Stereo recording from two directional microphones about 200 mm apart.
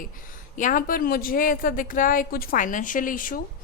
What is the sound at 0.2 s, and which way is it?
Speech, 40° left (ahead or behind).